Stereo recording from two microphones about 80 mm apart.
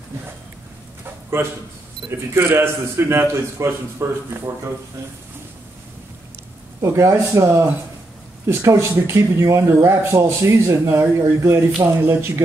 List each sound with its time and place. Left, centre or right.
1.3 s speech: right
6.8 s speech: right